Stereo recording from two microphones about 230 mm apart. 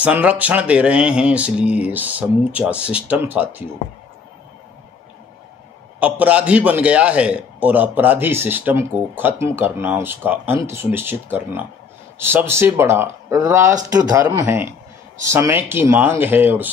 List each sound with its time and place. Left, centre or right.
0.0 s speech: centre
5.9 s a man's voice: centre